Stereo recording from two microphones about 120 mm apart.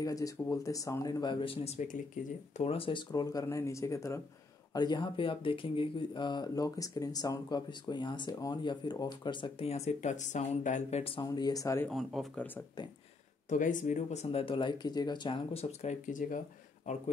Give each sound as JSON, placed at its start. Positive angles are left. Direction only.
{"t": 0.0, "sound": "speech", "side_deg": 30}
{"t": 1.2, "sound": "speech", "side_deg": 45}
{"t": 2.2, "sound": "speech", "side_deg": 90}
{"t": 2.5, "sound": "speech", "side_deg": 60}
{"t": 4.7, "sound": "speech", "side_deg": 40}
{"t": 9.7, "sound": "speech", "side_deg": 65}
{"t": 11.2, "sound": "speech", "side_deg": 30}
{"t": 11.9, "sound": "speech", "side_deg": 0}
{"t": 13.5, "sound": "speech", "side_deg": 90}
{"t": 14.2, "sound": "speech", "side_deg": 45}